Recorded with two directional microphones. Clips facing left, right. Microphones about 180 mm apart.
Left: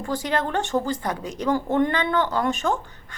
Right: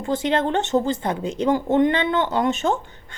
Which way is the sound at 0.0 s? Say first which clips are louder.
Right 4 dB; 25° right (ahead or behind).